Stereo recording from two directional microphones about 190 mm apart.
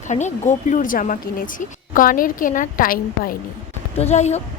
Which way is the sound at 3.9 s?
35° left (ahead or behind).